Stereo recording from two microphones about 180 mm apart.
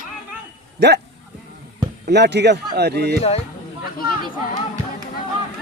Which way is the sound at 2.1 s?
70° right (ahead or behind).